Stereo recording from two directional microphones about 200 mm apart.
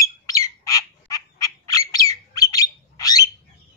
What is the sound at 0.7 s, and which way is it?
Squawk, 15° left (ahead or behind).